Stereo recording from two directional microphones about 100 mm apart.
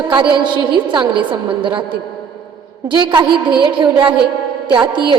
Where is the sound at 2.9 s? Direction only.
45° right (ahead or behind).